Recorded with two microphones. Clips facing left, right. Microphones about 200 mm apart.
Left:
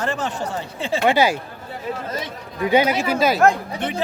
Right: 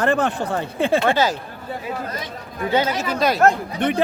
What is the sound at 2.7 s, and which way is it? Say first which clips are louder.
Speech: left 3 dB; 10° left (ahead or behind).